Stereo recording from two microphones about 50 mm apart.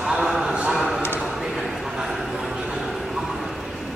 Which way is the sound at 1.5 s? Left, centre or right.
Centre.